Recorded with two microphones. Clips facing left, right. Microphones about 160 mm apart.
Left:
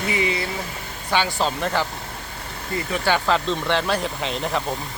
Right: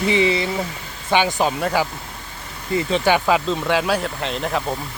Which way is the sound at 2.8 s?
20° right (ahead or behind).